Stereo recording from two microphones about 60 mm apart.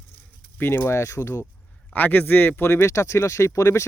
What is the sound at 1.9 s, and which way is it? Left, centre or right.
Speech, left.